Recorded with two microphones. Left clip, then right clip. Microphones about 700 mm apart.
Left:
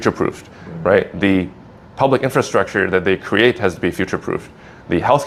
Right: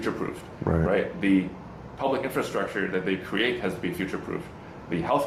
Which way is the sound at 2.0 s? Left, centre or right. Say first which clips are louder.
Left 11 dB; left.